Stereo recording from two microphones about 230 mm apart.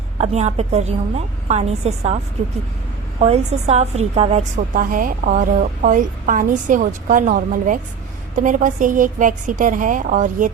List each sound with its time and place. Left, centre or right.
0.2 s a woman's voice: right
3.2 s a woman's voice: right